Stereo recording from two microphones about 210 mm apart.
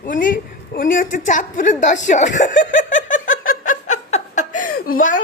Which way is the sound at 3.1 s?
65° left (ahead or behind).